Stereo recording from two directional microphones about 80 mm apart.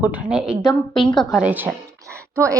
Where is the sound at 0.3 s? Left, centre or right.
Centre.